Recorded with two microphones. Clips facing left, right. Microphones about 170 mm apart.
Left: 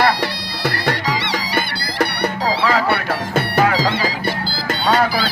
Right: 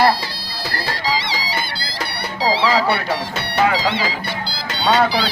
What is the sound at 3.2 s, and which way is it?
Music, 50° left (ahead or behind).